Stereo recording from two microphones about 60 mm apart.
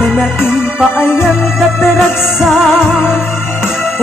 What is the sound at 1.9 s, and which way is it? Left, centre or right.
Music, centre.